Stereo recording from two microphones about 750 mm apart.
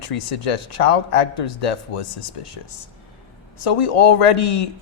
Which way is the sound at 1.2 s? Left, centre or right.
Left.